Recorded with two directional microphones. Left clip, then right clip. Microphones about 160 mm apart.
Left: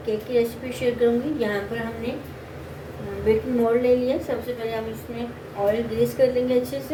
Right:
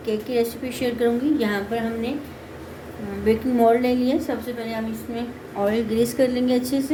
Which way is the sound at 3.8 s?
80° right.